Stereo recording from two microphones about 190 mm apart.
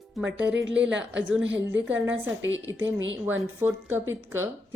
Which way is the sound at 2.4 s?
80° right.